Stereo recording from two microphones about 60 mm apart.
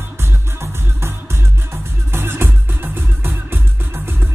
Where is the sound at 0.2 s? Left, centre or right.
Right.